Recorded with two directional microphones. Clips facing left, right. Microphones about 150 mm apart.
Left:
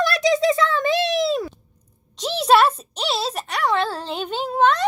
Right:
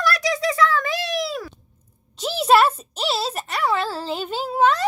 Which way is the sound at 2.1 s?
5° right (ahead or behind).